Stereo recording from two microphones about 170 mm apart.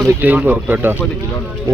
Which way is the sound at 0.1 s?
10° right (ahead or behind).